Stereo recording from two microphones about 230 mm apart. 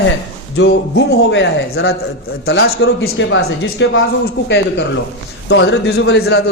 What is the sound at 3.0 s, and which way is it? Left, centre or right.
A man's voice, left.